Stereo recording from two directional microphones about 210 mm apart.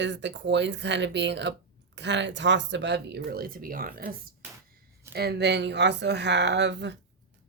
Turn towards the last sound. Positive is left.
turn(degrees=-55)  # may be behind; listen again after turning